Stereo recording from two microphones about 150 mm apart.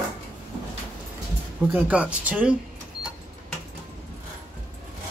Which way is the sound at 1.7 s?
10° right (ahead or behind).